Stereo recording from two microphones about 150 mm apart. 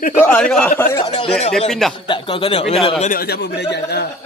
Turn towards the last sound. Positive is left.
turn(degrees=90)